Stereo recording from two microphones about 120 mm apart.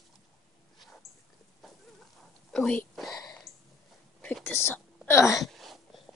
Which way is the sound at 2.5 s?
5° left (ahead or behind).